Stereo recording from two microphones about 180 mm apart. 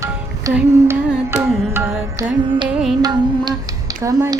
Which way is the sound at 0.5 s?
10° right (ahead or behind).